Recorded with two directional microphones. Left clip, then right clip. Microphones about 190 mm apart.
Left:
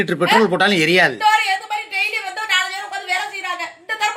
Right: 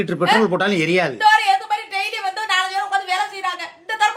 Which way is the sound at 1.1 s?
20° right (ahead or behind).